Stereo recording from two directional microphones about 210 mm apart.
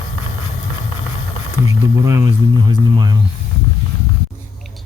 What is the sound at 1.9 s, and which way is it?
Speech, 15° right (ahead or behind).